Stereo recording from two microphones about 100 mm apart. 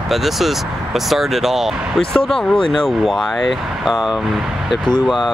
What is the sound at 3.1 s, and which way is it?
Speech, centre (ahead or behind).